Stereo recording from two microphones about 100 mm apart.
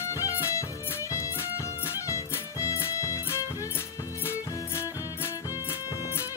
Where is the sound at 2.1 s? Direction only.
30° left (ahead or behind).